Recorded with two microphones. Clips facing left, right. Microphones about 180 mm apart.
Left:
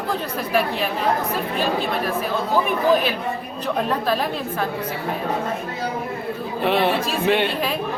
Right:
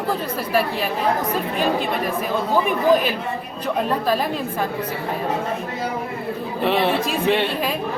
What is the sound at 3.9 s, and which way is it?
Speech, 10° right (ahead or behind).